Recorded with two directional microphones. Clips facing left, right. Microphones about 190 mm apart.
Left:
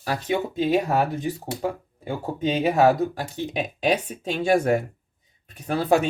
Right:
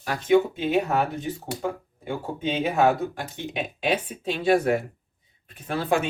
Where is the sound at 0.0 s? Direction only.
35° left (ahead or behind).